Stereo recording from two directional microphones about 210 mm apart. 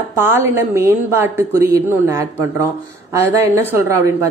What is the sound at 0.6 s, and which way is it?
A woman's voice, 10° right (ahead or behind).